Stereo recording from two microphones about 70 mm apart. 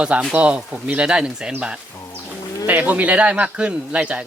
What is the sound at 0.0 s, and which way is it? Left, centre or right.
A man's voice, centre.